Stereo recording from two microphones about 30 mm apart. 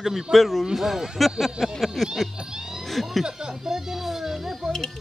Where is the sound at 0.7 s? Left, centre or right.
Centre.